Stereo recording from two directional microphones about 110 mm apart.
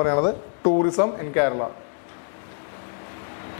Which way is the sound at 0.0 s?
20° left (ahead or behind).